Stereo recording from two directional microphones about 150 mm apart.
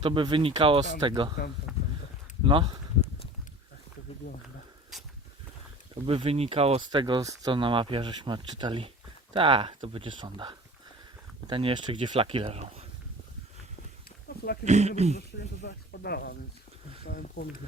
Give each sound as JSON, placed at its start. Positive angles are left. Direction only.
{"t": 0.0, "sound": "speech", "side_deg": -35}
{"t": 1.7, "sound": "a sound", "side_deg": -5}
{"t": 2.4, "sound": "speech", "side_deg": -35}
{"t": 4.2, "sound": "speech", "side_deg": 90}
{"t": 5.9, "sound": "speech", "side_deg": -40}
{"t": 6.9, "sound": "speech", "side_deg": -30}
{"t": 14.6, "sound": "speech", "side_deg": -50}
{"t": 15.9, "sound": "speech", "side_deg": 90}
{"t": 17.1, "sound": "speech", "side_deg": 65}